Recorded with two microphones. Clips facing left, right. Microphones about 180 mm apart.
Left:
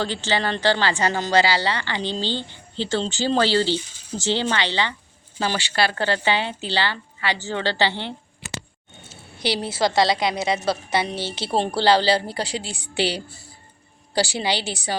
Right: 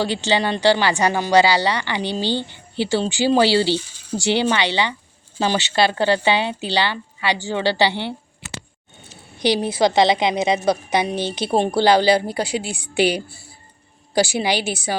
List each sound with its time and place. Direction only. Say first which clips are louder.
0.0 s a woman's voice: right 4 dB; 15° right (ahead or behind)